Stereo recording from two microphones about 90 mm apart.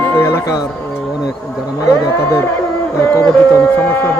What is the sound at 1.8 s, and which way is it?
Speech, 35° left (ahead or behind).